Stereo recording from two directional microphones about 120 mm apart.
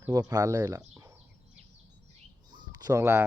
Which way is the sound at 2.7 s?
30° right (ahead or behind).